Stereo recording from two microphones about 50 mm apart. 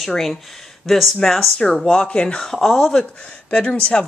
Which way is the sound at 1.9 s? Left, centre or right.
Left.